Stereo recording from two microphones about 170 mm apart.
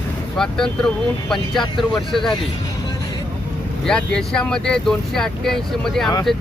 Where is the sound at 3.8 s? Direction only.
5° left (ahead or behind).